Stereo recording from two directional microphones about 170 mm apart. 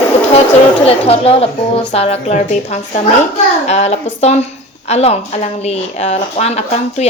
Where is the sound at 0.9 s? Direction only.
35° left (ahead or behind).